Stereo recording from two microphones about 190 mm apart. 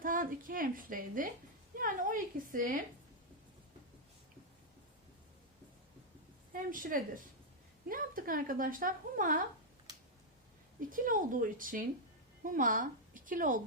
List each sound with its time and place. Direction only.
0.0 s a woman's voice: 45° right (ahead or behind)
6.5 s a woman's voice: 45° right (ahead or behind)
10.8 s a woman's voice: 45° right (ahead or behind)